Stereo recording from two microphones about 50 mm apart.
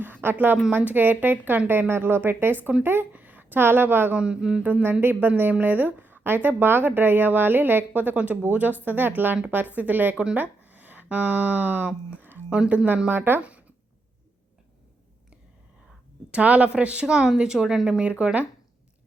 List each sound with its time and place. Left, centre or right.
0.0 s a sound: right
0.8 s a woman's voice: right
3.1 s speech: right
4.1 s a woman's voice: right
4.6 s a woman's voice: right
12.1 s a sound: right
12.5 s a woman's voice: right
13.1 s speech: right
13.4 s a sound: right
16.3 s a woman's voice: right